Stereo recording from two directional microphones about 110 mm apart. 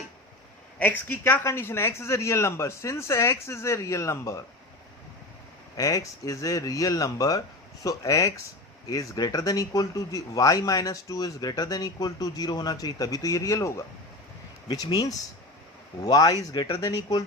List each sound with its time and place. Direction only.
0.8 s speech: 15° left (ahead or behind)
5.7 s speech: 30° left (ahead or behind)
14.7 s speech: 40° left (ahead or behind)